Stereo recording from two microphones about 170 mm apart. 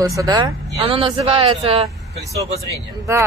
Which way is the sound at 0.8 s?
35° right (ahead or behind).